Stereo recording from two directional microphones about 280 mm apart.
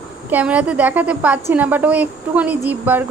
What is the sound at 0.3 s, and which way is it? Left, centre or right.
A woman's voice, centre.